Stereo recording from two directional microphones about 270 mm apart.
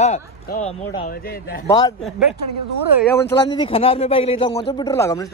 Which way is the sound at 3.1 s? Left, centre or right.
Centre.